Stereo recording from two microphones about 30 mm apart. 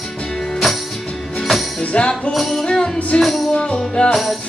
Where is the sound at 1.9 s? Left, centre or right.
Left.